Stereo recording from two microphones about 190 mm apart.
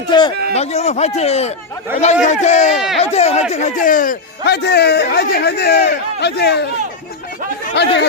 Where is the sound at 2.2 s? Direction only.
40° left (ahead or behind); by 6.7 s 60° left (ahead or behind).